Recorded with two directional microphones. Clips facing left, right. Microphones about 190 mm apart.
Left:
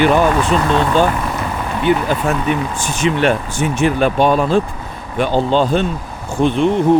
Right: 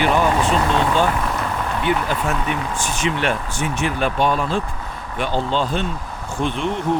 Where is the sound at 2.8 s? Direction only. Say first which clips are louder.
Left 7 dB; 35° left (ahead or behind).